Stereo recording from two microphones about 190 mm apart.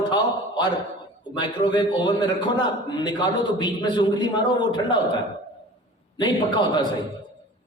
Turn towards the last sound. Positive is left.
turn(degrees=25)  # may be behind; listen again after turning